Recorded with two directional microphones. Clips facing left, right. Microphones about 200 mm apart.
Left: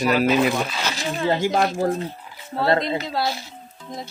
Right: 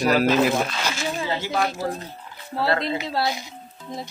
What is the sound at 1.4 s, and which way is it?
Speech, 40° left (ahead or behind).